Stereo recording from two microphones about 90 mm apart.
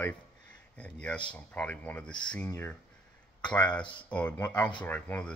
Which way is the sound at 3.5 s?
15° left (ahead or behind).